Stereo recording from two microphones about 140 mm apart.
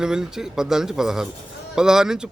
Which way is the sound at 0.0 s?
5° right (ahead or behind).